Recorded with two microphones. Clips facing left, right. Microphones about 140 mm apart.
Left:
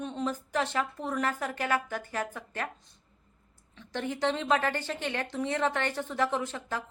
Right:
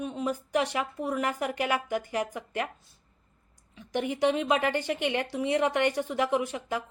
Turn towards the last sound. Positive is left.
turn(degrees=-15)  # may be behind; listen again after turning